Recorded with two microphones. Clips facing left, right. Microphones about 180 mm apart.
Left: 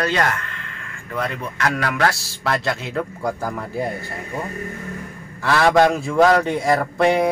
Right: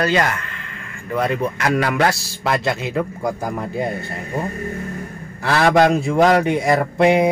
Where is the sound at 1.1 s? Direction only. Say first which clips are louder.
Right 6 dB; 15° right (ahead or behind).